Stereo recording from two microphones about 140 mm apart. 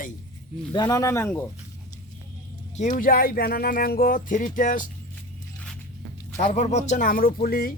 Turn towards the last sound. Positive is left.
turn(degrees=90)